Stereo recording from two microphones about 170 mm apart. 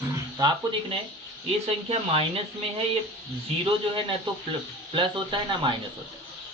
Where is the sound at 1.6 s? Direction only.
35° right (ahead or behind).